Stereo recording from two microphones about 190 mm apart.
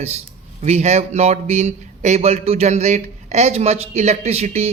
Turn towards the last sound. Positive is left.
turn(degrees=-35)  # may be behind; listen again after turning